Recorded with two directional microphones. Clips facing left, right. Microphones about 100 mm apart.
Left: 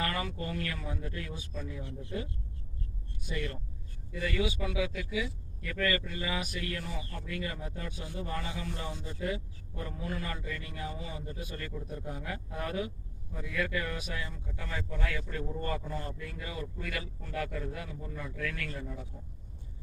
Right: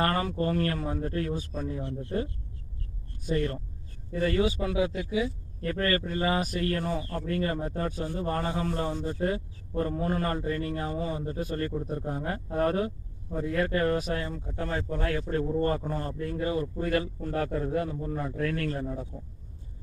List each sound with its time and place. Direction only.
0.0 s a man's voice: 40° right (ahead or behind)
1.8 s a man's voice: 50° right (ahead or behind)
3.2 s a man's voice: 40° right (ahead or behind)
6.8 s a man's voice: 55° right (ahead or behind); by 19.0 s 35° right (ahead or behind)